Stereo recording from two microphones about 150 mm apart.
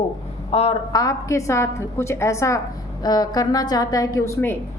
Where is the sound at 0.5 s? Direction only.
40° left (ahead or behind).